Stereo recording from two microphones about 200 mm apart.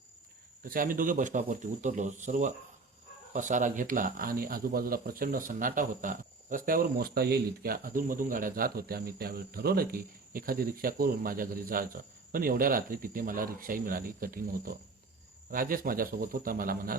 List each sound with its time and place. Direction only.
0.6 s speech: 45° right (ahead or behind)